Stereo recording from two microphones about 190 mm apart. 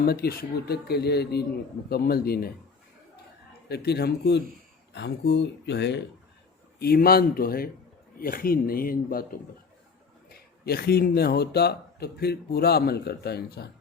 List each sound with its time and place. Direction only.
0.0 s speech: 55° left (ahead or behind)
3.7 s speech: 60° left (ahead or behind)